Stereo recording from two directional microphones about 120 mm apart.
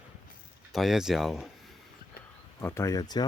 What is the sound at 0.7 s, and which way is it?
Speech, 5° right (ahead or behind).